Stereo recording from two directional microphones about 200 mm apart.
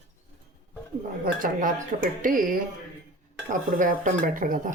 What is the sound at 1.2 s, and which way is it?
Speech, 45° right (ahead or behind).